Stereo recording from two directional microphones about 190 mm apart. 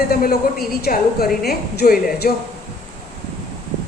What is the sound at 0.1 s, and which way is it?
A woman's voice, 50° left (ahead or behind).